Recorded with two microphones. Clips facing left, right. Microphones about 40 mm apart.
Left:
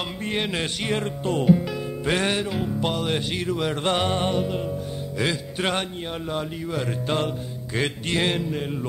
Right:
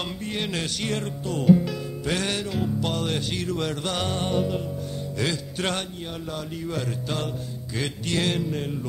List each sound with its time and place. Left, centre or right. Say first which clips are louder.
0.3 s music: left 4 dB; left
7.7 s music: left 3 dB; left